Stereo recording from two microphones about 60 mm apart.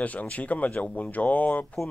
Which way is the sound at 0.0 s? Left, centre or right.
Left.